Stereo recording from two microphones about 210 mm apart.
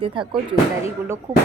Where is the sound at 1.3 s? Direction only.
15° right (ahead or behind).